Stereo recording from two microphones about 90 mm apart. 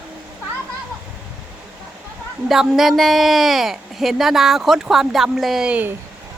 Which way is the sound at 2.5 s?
5° right (ahead or behind).